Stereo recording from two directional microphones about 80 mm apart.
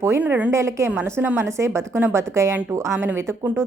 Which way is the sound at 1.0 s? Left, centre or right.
Right.